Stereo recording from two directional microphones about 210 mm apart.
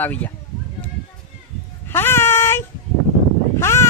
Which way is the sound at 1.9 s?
10° left (ahead or behind).